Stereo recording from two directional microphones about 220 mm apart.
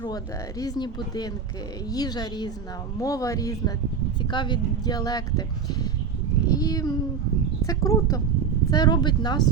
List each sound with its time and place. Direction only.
0.6 s speech: 20° left (ahead or behind)